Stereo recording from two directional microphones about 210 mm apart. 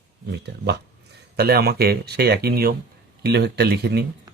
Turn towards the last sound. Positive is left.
turn(degrees=-50)  # may be behind; listen again after turning